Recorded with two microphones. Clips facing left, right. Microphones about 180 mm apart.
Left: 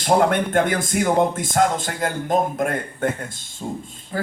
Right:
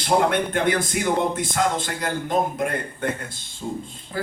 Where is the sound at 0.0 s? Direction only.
50° left (ahead or behind).